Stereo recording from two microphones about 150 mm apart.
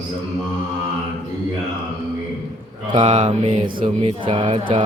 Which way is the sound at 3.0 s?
30° right (ahead or behind).